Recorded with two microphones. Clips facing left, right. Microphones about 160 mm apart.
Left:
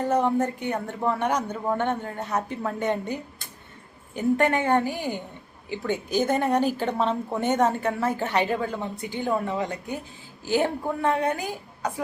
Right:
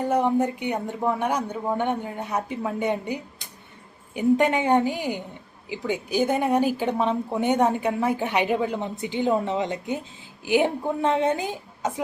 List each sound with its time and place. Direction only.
0.0 s a woman's voice: 10° right (ahead or behind)